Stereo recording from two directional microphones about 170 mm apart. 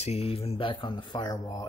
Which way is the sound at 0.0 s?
35° left (ahead or behind).